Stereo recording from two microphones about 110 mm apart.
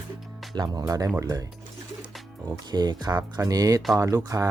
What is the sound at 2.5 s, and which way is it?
Speech, 40° right (ahead or behind).